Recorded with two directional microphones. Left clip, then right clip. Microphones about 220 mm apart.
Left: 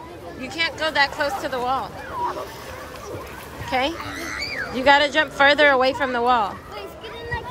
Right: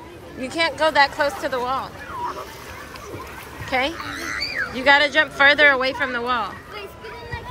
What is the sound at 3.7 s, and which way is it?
Speech, 10° left (ahead or behind).